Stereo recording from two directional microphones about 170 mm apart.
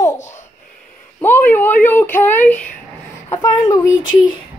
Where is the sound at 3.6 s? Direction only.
20° left (ahead or behind).